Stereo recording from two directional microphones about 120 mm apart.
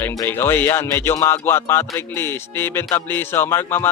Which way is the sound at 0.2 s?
20° left (ahead or behind).